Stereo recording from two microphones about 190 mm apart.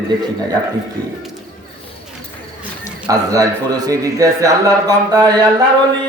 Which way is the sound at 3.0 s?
20° right (ahead or behind).